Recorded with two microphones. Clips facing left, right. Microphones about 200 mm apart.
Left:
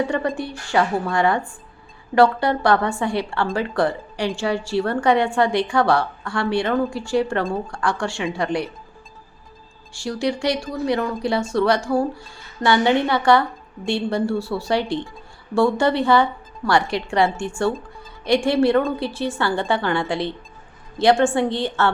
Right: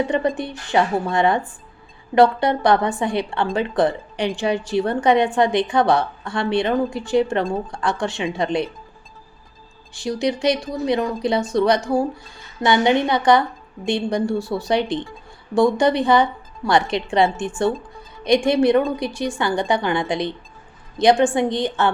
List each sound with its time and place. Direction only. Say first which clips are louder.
0.1 s a woman's voice: right 2 dB; 20° right (ahead or behind)
9.9 s a woman's voice: right 1 dB; 20° right (ahead or behind)